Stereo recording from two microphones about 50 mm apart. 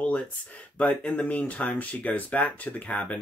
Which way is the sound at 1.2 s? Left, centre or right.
Left.